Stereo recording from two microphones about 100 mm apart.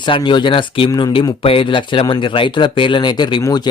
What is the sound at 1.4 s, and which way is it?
Speech, 65° left (ahead or behind).